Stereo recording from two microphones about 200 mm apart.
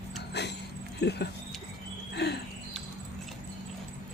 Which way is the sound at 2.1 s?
55° left (ahead or behind).